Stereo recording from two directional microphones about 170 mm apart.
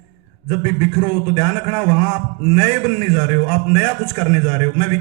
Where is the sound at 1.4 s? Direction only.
35° right (ahead or behind).